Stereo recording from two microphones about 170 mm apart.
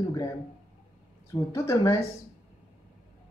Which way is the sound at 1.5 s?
15° left (ahead or behind).